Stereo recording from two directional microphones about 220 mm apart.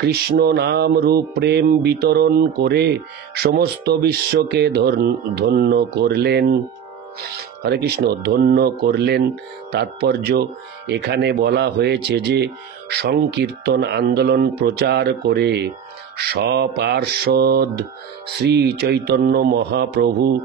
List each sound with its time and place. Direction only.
0.0 s speech: 45° right (ahead or behind)